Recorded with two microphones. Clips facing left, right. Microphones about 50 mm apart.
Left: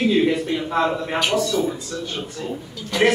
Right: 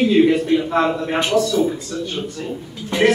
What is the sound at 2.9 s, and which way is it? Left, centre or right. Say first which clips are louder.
Speech: right 2 dB; right.